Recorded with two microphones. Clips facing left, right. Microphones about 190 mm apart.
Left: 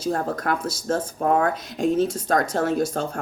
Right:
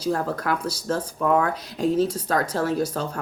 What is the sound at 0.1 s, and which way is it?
Speech, 45° left (ahead or behind).